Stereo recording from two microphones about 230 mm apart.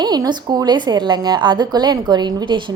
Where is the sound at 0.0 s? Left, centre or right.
Centre.